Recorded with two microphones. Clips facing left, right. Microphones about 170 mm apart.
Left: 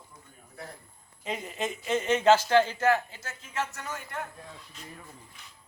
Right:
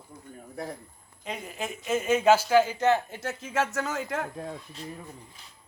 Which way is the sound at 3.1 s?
60° right (ahead or behind).